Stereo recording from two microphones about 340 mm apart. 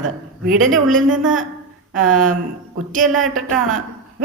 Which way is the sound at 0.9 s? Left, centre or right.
Right.